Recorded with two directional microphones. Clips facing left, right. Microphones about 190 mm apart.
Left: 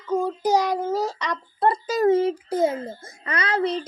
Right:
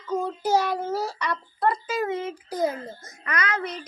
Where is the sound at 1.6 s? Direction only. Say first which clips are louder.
Left 6 dB; 40° left (ahead or behind).